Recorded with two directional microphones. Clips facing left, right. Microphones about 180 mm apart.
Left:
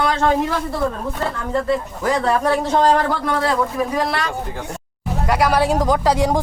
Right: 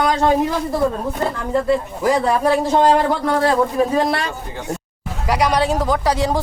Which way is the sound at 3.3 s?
30° right (ahead or behind).